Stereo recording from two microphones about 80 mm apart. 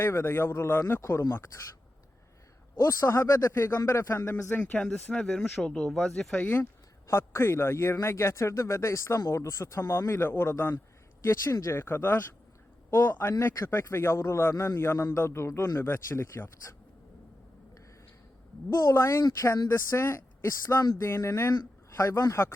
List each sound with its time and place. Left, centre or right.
0.0 s a man's voice: left
2.8 s a man's voice: left; by 6.3 s centre
7.1 s a man's voice: left
11.2 s a man's voice: left
18.9 s a man's voice: left